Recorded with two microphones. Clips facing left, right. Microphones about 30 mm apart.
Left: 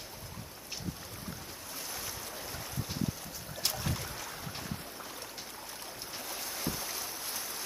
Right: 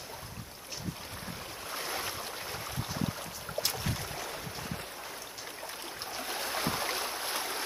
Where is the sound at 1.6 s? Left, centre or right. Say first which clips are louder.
Right 7 dB; right.